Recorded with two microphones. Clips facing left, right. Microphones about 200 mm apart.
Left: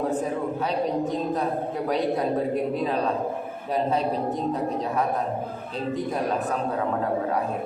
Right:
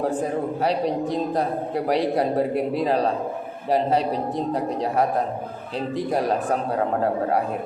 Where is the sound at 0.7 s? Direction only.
35° right (ahead or behind).